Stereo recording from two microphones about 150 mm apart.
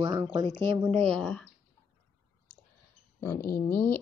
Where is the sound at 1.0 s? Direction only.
5° left (ahead or behind).